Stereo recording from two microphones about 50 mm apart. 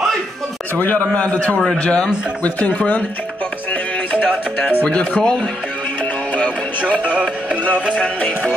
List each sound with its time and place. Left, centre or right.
0.7 s a man's voice: left
2.4 s speech: left
4.1 s a man's voice: left
6.3 s music: left